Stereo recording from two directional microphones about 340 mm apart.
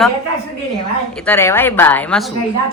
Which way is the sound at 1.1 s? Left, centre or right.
Centre.